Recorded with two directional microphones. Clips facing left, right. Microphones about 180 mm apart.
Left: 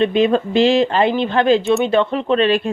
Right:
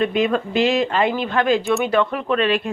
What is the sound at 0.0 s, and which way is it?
Speech, 30° left (ahead or behind).